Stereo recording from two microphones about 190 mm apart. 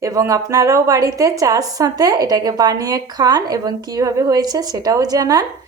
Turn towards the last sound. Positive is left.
turn(degrees=-20)  # may be behind; listen again after turning